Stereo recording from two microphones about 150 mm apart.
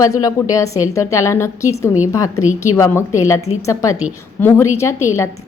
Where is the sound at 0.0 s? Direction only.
25° left (ahead or behind).